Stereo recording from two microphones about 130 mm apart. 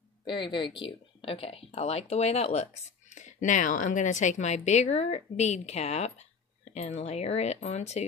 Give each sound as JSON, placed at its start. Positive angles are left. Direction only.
{"t": 0.2, "sound": "speech", "side_deg": 40}